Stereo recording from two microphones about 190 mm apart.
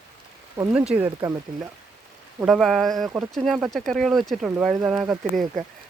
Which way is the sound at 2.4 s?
Centre (ahead or behind).